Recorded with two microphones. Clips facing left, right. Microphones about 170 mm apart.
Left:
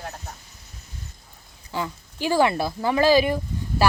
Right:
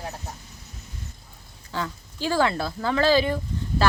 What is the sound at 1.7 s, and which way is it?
A woman's voice, 15° left (ahead or behind).